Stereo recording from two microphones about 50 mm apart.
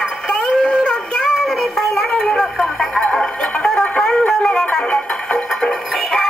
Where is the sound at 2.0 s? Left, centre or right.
Centre.